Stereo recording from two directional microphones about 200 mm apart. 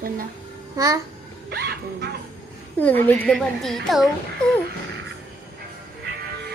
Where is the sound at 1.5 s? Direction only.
50° right (ahead or behind).